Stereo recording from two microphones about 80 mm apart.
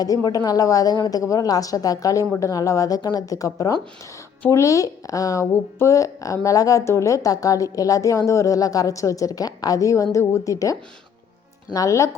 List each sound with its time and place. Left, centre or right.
0.0 s speech: left